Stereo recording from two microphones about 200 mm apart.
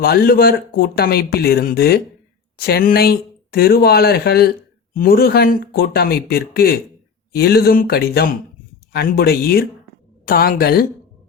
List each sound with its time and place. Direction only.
0.0 s speech: 50° left (ahead or behind)